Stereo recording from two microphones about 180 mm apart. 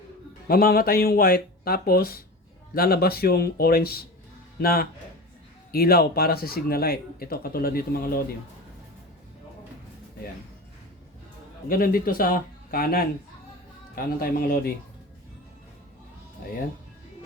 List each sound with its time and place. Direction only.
0.4 s speech: 55° left (ahead or behind)
11.7 s speech: 55° left (ahead or behind)